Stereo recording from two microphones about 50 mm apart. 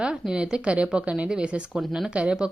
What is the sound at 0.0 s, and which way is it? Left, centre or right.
A woman's voice, centre.